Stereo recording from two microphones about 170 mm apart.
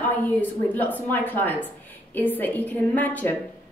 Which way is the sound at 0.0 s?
10° left (ahead or behind).